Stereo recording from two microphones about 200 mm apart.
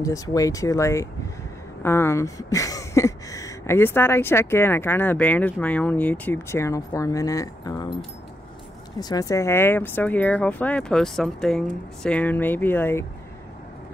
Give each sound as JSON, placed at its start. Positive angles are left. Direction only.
{"t": 0.0, "sound": "speech", "side_deg": 15}
{"t": 9.0, "sound": "speech", "side_deg": 20}